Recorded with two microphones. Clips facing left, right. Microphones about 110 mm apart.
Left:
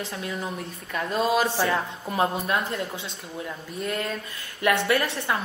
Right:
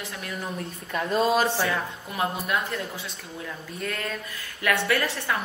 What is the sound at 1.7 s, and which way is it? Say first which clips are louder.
Speech: left 3 dB; 30° left (ahead or behind).